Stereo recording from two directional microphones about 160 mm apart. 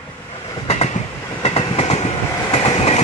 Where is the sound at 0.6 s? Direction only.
40° left (ahead or behind).